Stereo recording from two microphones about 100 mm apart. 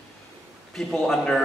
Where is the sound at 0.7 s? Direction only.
5° left (ahead or behind).